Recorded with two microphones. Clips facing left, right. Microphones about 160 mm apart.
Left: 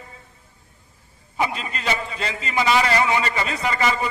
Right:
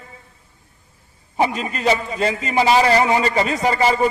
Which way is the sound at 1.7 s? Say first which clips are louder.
Right 7 dB; 45° right (ahead or behind).